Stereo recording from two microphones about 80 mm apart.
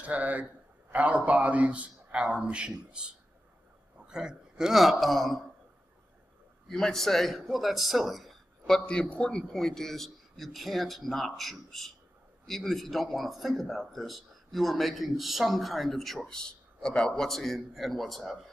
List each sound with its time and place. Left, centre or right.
0.0 s a man's voice: centre
6.7 s speech: centre